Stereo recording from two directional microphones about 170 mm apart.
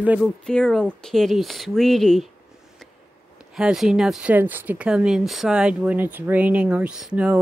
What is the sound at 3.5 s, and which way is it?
Speech, 5° right (ahead or behind).